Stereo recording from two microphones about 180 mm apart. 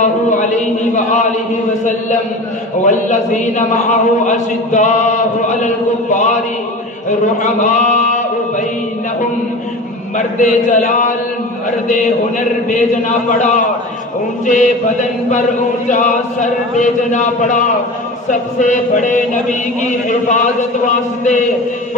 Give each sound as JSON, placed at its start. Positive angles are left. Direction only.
{"t": 0.0, "sound": "a sound", "side_deg": 45}
{"t": 2.8, "sound": "a man's voice", "side_deg": 45}
{"t": 10.1, "sound": "a man's voice", "side_deg": 40}